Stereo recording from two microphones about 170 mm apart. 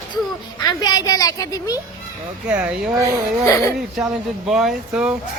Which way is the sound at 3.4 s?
20° left (ahead or behind).